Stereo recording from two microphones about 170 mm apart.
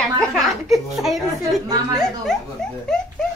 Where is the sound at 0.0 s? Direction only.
Centre (ahead or behind).